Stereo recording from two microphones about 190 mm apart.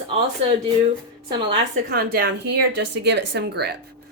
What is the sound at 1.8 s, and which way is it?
A woman's voice, 55° right (ahead or behind).